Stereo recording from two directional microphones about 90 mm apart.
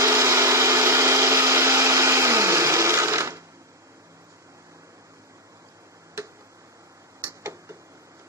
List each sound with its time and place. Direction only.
0.0 s blender: 35° right (ahead or behind)
7.2 s tick-tock: 35° right (ahead or behind)